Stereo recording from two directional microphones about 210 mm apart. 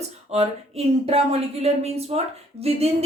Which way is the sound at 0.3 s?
30° right (ahead or behind).